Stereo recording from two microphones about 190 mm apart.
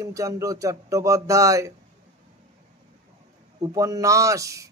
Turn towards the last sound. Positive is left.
turn(degrees=-15)  # may be behind; listen again after turning